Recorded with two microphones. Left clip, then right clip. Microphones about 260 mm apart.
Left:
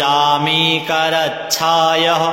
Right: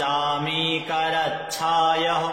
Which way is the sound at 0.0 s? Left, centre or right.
Left.